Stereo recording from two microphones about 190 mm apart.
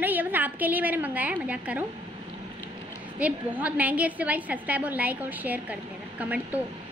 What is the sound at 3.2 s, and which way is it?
A woman's voice, 5° right (ahead or behind).